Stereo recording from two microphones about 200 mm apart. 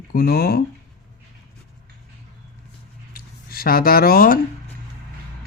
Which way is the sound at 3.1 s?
50° left (ahead or behind).